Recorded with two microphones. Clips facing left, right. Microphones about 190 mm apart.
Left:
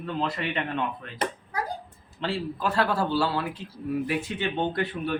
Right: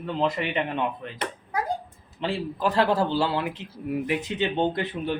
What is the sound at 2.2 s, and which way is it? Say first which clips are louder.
A man's voice: right 2 dB; 15° right (ahead or behind).